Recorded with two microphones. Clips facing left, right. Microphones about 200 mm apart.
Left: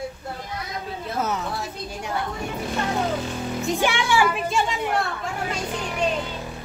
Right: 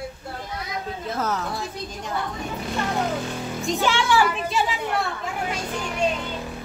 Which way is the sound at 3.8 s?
10° left (ahead or behind).